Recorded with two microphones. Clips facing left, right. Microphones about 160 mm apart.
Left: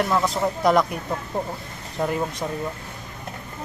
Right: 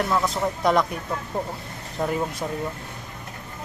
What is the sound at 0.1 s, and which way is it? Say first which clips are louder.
Speech: left 2 dB; 5° left (ahead or behind).